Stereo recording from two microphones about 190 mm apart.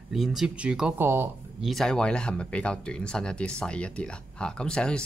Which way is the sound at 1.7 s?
Centre (ahead or behind).